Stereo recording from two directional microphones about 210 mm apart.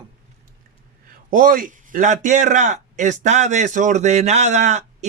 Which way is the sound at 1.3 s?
40° right (ahead or behind).